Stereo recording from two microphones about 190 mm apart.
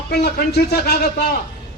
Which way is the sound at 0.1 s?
55° left (ahead or behind).